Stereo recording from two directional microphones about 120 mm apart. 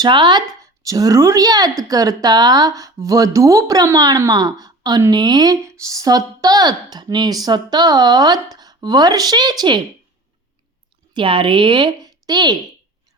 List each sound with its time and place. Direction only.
0.0 s speech: 40° right (ahead or behind)
11.1 s speech: 45° right (ahead or behind)